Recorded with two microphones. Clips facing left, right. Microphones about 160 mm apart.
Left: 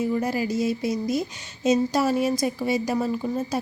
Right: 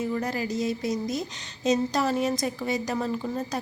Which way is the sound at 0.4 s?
40° right (ahead or behind).